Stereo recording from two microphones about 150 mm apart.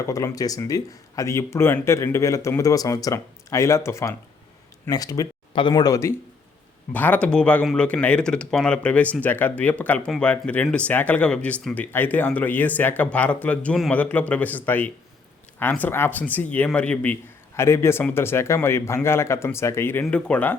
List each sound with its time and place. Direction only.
0.0 s speech: 20° left (ahead or behind)